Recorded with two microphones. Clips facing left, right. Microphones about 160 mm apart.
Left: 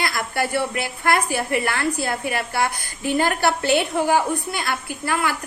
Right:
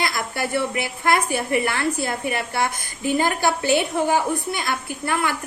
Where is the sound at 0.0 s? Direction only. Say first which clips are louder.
Left 1 dB; 20° right (ahead or behind).